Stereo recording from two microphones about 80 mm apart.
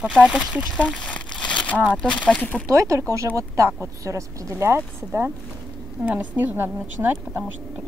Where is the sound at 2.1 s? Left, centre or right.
Centre.